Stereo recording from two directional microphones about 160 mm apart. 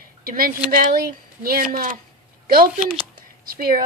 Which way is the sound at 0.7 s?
65° right (ahead or behind).